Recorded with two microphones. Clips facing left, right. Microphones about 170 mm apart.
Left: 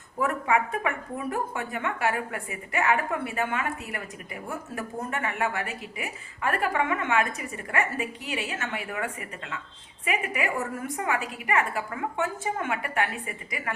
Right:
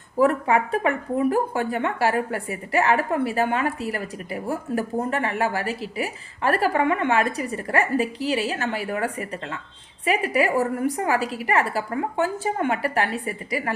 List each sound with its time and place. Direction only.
0.2 s a woman's voice: 35° right (ahead or behind)